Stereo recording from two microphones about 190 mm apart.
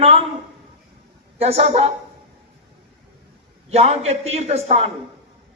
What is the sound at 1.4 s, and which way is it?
Speech, 30° right (ahead or behind).